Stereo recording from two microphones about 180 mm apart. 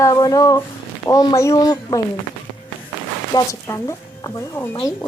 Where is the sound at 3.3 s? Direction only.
20° left (ahead or behind).